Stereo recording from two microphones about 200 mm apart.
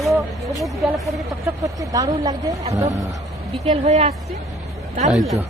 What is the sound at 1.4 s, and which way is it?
Speech, 15° right (ahead or behind).